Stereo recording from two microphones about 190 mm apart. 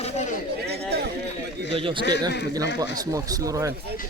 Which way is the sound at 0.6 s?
60° right (ahead or behind).